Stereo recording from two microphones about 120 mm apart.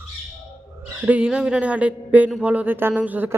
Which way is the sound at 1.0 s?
10° right (ahead or behind).